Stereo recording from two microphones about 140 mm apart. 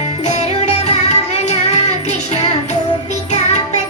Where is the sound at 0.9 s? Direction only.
55° left (ahead or behind).